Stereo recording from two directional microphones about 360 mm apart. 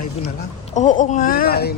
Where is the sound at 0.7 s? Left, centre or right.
Left.